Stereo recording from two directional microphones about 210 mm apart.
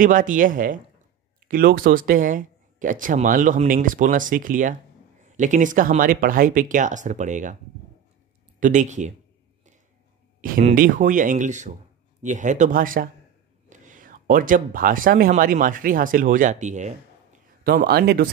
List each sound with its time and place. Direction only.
0.0 s speech: 40° right (ahead or behind)
8.5 s speech: 35° right (ahead or behind)
10.6 s speech: 40° right (ahead or behind)
17.6 s speech: 45° right (ahead or behind)